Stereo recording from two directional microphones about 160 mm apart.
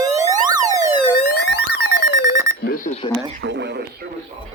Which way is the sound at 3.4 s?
90° right.